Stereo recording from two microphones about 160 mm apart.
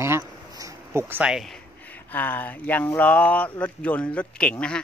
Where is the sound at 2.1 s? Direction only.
10° left (ahead or behind).